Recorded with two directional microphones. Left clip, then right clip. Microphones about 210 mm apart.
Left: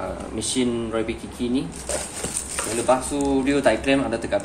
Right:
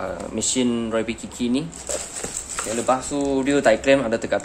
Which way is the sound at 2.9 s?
45° right (ahead or behind).